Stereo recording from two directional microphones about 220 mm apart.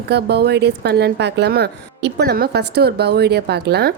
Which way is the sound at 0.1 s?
50° right (ahead or behind).